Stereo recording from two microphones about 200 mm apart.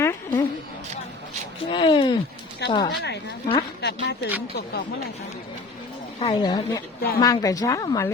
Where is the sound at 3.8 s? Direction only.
55° left (ahead or behind).